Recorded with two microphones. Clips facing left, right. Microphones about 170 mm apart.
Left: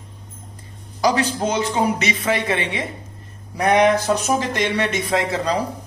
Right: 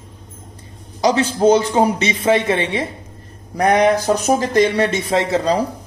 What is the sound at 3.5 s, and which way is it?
Speech, 40° right (ahead or behind).